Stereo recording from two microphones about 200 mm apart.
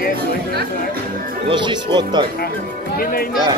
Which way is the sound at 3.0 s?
50° left (ahead or behind).